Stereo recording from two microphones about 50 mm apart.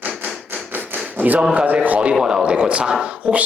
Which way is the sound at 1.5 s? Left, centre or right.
Right.